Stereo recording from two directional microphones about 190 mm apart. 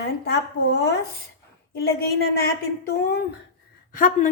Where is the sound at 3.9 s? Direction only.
45° left (ahead or behind).